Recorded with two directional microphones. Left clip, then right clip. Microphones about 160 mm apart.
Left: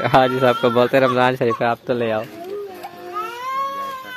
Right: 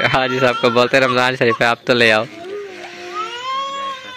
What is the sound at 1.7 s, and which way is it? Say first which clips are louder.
Speech: right 7 dB; 20° right (ahead or behind).